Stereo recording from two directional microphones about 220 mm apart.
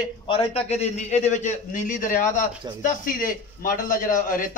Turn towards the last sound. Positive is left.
turn(degrees=40)  # may be behind; listen again after turning